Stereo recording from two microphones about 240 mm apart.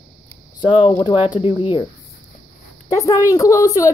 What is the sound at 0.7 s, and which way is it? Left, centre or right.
Speech, centre.